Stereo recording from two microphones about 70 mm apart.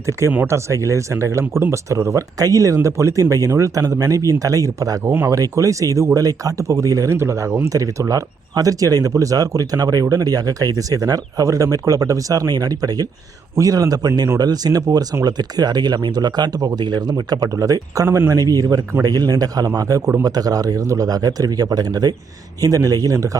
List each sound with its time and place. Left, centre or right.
0.0 s speech: right
5.0 s speech: right
5.3 s speech: right
7.2 s speech: right
7.6 s speech: right
18.3 s speech: right
22.6 s speech: right